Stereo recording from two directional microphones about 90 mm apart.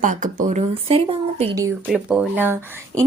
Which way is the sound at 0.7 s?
90° right.